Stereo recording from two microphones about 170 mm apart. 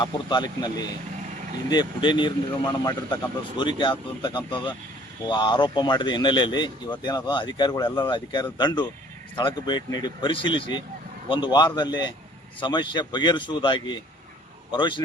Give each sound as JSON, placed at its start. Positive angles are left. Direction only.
{"t": 0.0, "sound": "a man's voice", "side_deg": 25}